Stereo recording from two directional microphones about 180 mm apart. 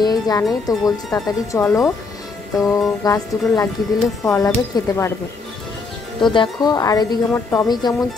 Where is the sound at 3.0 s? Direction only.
20° left (ahead or behind).